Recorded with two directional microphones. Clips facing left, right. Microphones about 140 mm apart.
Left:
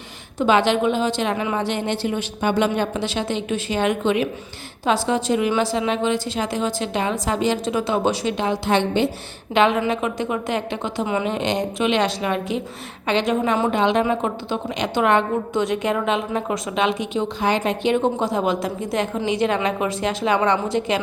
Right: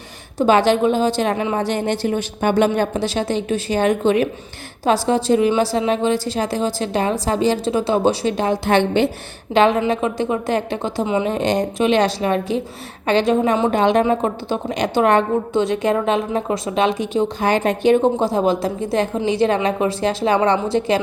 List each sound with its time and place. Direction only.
0.3 s a woman's voice: 40° right (ahead or behind)
9.6 s a woman's voice: 35° right (ahead or behind)
11.0 s a woman's voice: 25° right (ahead or behind)
11.3 s a woman's voice: 40° right (ahead or behind)